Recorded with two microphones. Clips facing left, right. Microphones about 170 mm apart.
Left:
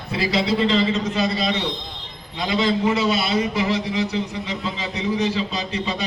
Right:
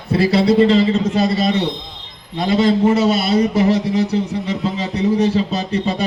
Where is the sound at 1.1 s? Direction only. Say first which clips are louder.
Right 6 dB; 40° right (ahead or behind).